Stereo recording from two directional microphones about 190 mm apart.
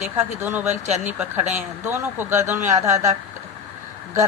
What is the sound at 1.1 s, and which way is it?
Speech, 10° right (ahead or behind).